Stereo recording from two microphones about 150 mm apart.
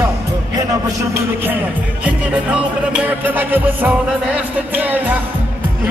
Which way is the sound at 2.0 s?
10° right (ahead or behind).